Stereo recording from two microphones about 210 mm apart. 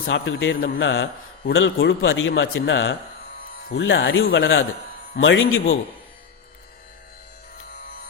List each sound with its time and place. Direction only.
0.1 s a man's voice: 60° left (ahead or behind)